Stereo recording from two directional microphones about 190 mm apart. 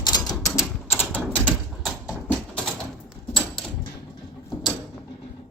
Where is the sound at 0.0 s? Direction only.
20° left (ahead or behind); by 2.1 s centre (ahead or behind).